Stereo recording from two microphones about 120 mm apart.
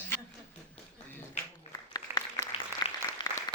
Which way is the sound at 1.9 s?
30° left (ahead or behind).